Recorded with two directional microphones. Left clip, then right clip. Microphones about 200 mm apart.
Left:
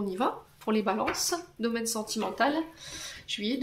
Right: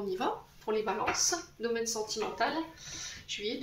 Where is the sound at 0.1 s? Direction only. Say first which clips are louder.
Left 3 dB; 45° left (ahead or behind).